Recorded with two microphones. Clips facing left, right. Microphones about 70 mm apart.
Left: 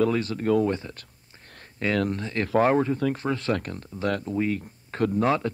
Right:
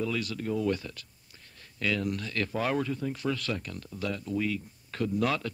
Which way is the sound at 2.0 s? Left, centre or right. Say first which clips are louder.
Left 4 dB; left.